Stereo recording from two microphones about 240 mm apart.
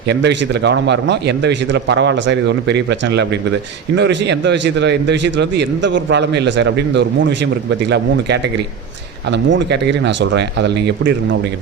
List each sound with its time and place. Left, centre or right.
0.1 s a man's voice: right